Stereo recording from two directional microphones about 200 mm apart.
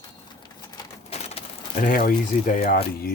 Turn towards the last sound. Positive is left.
turn(degrees=50)  # may be behind; listen again after turning